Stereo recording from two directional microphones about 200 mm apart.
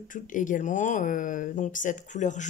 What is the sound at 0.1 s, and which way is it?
Speech, 40° left (ahead or behind).